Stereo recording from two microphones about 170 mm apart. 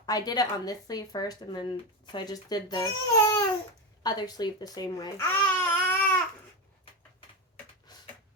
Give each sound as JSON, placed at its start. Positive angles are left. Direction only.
{"t": 0.0, "sound": "speech", "side_deg": 25}
{"t": 5.6, "sound": "babbling", "side_deg": 5}
{"t": 7.9, "sound": "a sound", "side_deg": 25}